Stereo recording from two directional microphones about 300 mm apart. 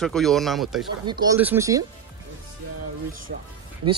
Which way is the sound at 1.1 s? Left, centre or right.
Centre.